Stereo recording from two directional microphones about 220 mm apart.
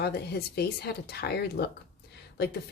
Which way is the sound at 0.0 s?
45° left (ahead or behind).